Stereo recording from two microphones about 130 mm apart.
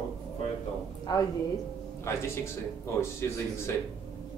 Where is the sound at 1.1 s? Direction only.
30° left (ahead or behind).